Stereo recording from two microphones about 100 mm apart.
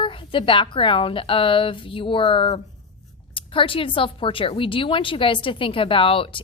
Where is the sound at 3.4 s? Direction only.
60° left (ahead or behind).